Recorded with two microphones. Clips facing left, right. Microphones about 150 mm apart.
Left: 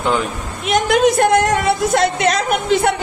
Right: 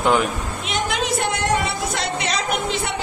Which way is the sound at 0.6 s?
55° left (ahead or behind).